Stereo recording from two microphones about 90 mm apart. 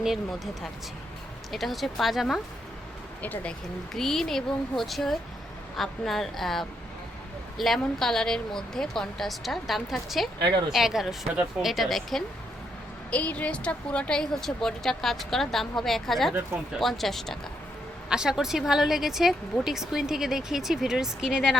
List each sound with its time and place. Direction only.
1.5 s speech: centre (ahead or behind)
3.9 s speech: 5° left (ahead or behind)
13.1 s speech: 15° left (ahead or behind); by 21.6 s 5° right (ahead or behind)